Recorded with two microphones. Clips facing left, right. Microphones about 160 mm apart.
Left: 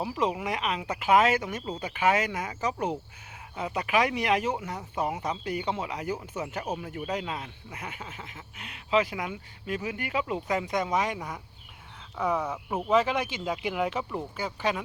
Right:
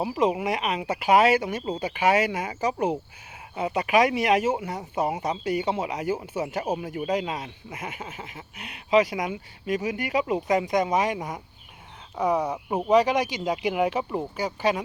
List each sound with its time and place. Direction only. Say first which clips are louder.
0.0 s speech: right 5 dB; 10° right (ahead or behind)
12.4 s speech: right 4 dB; 15° right (ahead or behind)